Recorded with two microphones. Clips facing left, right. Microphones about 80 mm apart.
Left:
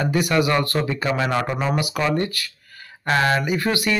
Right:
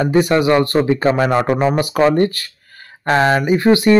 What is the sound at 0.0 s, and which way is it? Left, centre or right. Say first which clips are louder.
Speech: right 6 dB; right.